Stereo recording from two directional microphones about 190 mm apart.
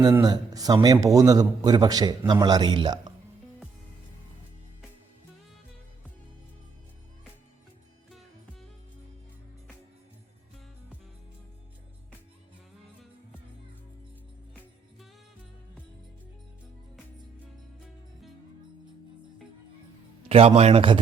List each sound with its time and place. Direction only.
0.0 s a man's voice: 20° right (ahead or behind)
20.2 s speech: 30° right (ahead or behind)